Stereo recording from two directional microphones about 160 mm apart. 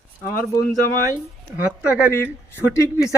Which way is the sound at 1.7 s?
5° right (ahead or behind).